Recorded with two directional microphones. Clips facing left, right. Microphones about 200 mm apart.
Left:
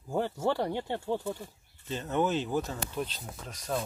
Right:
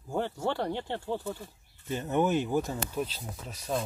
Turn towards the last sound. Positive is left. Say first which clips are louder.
# right 1 dB
turn(degrees=-5)  # may be behind; listen again after turning